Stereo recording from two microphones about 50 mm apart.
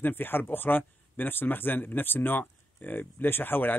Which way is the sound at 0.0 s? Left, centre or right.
Left.